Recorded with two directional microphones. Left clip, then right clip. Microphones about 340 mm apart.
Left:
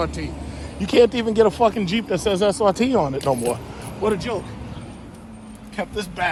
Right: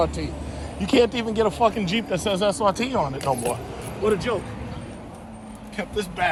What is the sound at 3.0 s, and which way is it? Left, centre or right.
Speech, centre.